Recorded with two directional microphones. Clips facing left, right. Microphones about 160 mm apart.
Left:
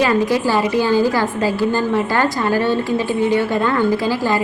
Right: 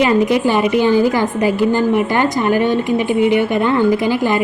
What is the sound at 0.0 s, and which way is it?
A woman's voice, 20° right (ahead or behind).